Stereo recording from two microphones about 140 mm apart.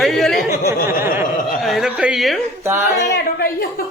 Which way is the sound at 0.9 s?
15° right (ahead or behind).